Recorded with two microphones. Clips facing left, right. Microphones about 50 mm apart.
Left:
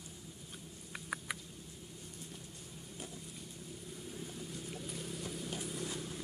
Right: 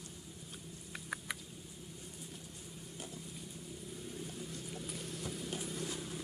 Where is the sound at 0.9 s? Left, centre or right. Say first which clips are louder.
Left 1 dB; centre.